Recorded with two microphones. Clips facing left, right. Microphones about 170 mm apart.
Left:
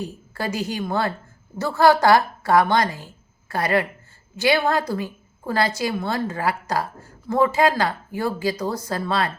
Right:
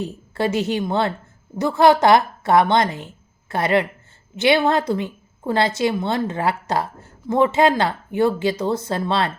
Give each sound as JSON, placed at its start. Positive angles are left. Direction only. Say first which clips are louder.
{"t": 0.0, "sound": "a woman's voice", "louder": "right 5 dB", "side_deg": -25}